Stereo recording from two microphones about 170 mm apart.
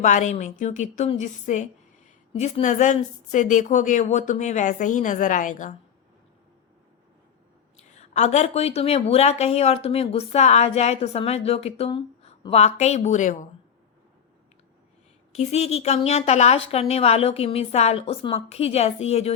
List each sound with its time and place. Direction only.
0.0 s speech: 45° left (ahead or behind)
7.8 s speech: 40° left (ahead or behind)
15.3 s speech: 40° left (ahead or behind)